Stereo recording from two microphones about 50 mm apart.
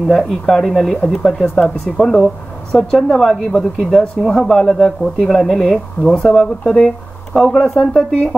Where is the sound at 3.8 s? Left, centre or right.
Centre.